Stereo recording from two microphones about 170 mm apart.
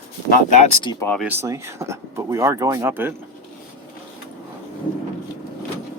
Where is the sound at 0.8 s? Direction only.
25° left (ahead or behind).